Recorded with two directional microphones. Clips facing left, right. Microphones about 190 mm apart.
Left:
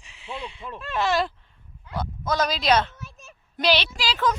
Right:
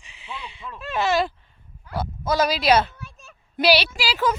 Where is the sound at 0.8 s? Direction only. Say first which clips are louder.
Right 2 dB; 5° right (ahead or behind).